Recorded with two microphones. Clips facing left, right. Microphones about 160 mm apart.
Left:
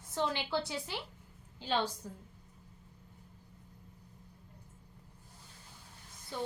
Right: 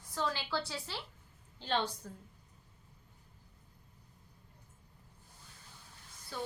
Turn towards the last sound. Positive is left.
turn(degrees=20)  # may be behind; listen again after turning